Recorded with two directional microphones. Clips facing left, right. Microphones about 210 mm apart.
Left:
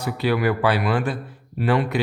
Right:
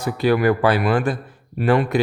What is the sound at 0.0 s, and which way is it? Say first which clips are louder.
Speech: right 4 dB; 45° right (ahead or behind).